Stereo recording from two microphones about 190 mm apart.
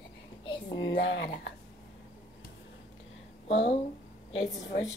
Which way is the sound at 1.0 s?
75° left (ahead or behind).